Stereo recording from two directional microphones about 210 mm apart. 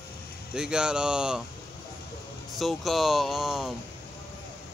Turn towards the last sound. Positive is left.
turn(degrees=0)  # may be behind; listen again after turning